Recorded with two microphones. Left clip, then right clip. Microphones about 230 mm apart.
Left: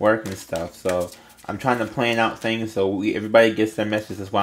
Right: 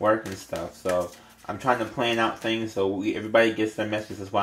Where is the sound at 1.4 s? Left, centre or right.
Left.